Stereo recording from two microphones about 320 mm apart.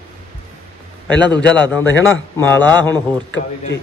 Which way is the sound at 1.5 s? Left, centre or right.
Centre.